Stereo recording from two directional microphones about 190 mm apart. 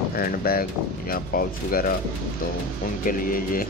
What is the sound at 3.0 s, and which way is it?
Speech, 50° left (ahead or behind).